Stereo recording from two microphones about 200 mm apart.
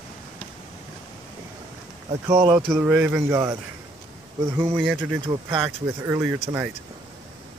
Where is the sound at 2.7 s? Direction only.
10° right (ahead or behind).